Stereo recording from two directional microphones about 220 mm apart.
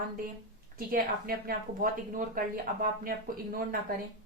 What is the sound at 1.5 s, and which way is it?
Speech, 40° right (ahead or behind).